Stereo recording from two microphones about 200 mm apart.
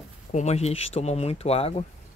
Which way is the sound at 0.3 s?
35° left (ahead or behind).